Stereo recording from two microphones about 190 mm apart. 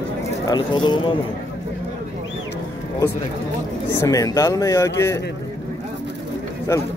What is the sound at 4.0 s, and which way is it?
Speech, 20° left (ahead or behind).